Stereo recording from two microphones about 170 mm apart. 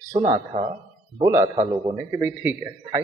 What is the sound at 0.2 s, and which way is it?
A man's voice, 35° right (ahead or behind).